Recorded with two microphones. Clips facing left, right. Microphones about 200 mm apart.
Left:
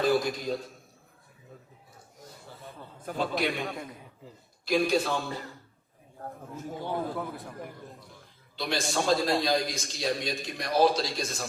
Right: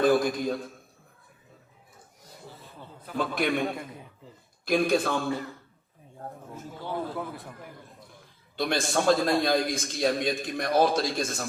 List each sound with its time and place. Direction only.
0.0 s a man's voice: 50° right (ahead or behind)
3.2 s a man's voice: 55° right (ahead or behind)
4.6 s a man's voice: 55° right (ahead or behind)
6.7 s a man's voice: 15° left (ahead or behind)
8.5 s a man's voice: 55° right (ahead or behind)